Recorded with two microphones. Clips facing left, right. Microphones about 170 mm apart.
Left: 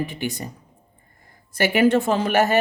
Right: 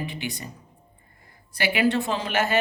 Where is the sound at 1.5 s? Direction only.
45° left (ahead or behind).